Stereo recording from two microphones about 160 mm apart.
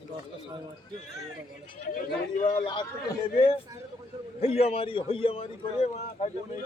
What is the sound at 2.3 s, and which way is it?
Speech, 55° left (ahead or behind).